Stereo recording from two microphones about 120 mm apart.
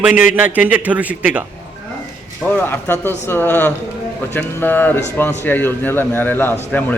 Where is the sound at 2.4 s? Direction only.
15° left (ahead or behind).